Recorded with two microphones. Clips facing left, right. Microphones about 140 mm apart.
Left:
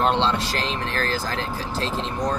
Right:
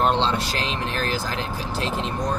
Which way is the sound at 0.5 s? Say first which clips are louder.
Even; 15° right (ahead or behind).